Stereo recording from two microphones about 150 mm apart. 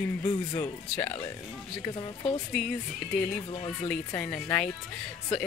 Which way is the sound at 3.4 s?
40° left (ahead or behind).